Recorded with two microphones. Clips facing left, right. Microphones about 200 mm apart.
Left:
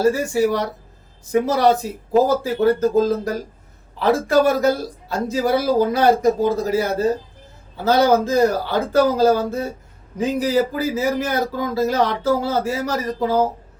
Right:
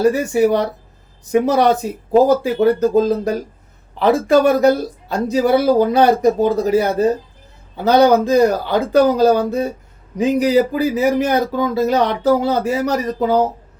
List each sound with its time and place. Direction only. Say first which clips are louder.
0.0 s speech: right 3 dB; 20° right (ahead or behind)